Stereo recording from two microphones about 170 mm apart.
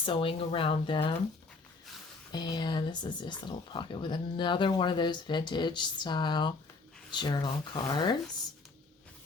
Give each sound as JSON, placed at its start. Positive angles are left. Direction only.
{"t": 0.0, "sound": "speech", "side_deg": 30}
{"t": 2.3, "sound": "speech", "side_deg": 25}